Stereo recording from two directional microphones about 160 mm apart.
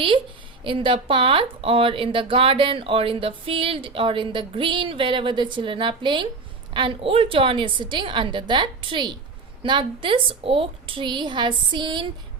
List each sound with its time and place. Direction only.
0.6 s a woman's voice: 30° right (ahead or behind)